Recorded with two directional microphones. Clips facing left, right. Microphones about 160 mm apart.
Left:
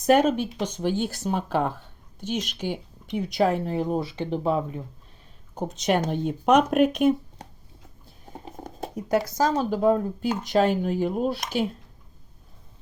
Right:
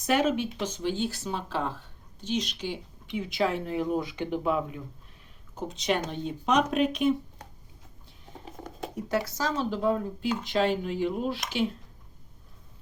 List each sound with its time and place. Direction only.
0.0 s speech: 40° left (ahead or behind)
8.6 s speech: 35° left (ahead or behind)